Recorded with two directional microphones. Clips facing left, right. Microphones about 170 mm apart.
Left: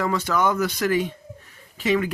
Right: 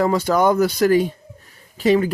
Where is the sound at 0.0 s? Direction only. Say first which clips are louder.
Right 6 dB; 35° right (ahead or behind).